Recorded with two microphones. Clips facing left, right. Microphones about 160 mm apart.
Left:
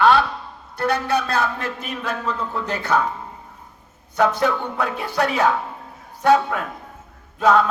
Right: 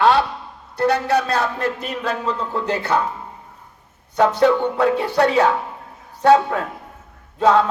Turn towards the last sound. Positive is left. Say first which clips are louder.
# right 1 dB
turn(degrees=-30)  # may be behind; listen again after turning